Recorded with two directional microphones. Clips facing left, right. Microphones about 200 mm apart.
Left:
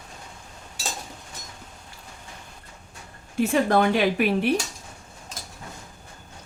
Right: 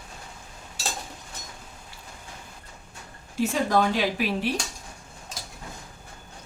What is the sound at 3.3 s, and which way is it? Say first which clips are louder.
Speech: left 3 dB; 60° left (ahead or behind).